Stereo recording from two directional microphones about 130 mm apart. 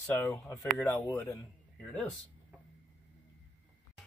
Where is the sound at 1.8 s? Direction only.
10° left (ahead or behind).